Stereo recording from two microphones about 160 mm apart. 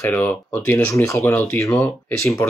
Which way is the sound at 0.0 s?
10° left (ahead or behind).